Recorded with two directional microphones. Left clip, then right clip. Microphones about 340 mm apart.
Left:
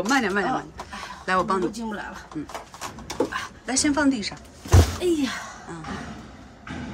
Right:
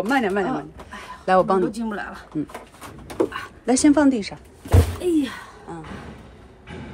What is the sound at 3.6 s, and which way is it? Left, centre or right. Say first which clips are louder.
Speech: right 6 dB; centre.